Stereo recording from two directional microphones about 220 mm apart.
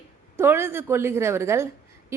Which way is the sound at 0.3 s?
10° right (ahead or behind).